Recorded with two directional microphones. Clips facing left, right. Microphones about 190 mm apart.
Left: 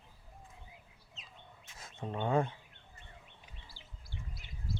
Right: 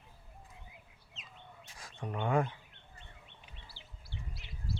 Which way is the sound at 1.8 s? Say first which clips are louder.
Even; 25° left (ahead or behind).